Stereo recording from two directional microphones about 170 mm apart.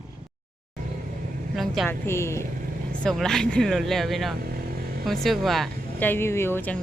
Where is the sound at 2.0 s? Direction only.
15° left (ahead or behind).